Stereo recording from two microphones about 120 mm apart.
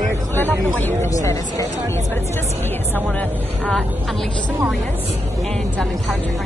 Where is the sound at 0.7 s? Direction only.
15° left (ahead or behind).